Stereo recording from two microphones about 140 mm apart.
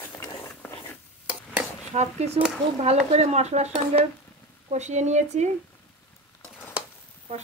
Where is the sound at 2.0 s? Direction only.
55° right (ahead or behind).